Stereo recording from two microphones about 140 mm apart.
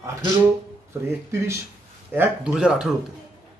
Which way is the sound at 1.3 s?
20° right (ahead or behind).